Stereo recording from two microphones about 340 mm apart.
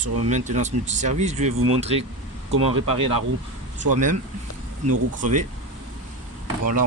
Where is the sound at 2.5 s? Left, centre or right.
Right.